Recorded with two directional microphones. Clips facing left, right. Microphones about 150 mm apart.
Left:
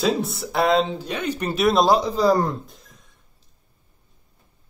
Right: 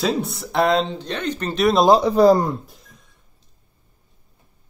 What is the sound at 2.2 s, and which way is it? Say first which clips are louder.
Speech: right 7 dB; 60° right (ahead or behind).